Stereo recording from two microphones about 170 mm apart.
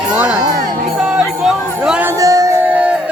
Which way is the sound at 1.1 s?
5° right (ahead or behind).